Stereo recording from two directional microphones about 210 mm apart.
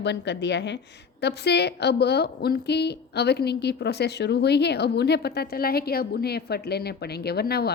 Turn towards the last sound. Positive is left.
turn(degrees=50)  # may be behind; listen again after turning